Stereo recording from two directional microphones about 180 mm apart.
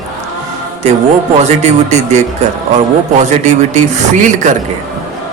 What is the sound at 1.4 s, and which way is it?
Speech, 40° right (ahead or behind).